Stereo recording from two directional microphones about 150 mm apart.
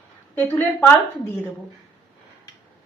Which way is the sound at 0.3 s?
15° left (ahead or behind).